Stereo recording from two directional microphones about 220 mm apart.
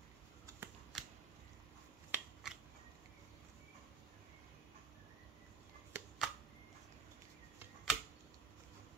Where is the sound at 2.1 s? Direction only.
5° right (ahead or behind).